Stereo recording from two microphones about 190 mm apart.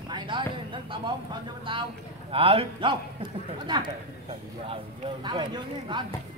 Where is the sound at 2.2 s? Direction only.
30° right (ahead or behind).